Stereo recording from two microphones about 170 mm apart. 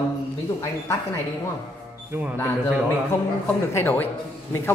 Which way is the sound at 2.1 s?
10° right (ahead or behind).